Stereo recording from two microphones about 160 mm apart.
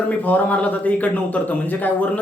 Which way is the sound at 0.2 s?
10° left (ahead or behind).